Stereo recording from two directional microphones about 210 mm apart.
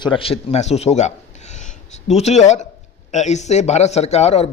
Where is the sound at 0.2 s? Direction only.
30° left (ahead or behind).